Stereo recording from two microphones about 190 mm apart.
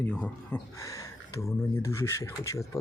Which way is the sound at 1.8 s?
15° left (ahead or behind).